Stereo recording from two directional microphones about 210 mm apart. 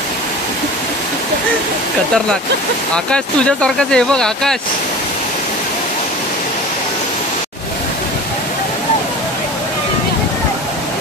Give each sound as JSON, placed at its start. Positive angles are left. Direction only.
{"t": 3.1, "sound": "speech", "side_deg": 5}